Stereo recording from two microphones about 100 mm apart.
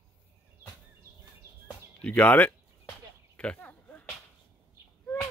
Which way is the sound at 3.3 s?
10° left (ahead or behind).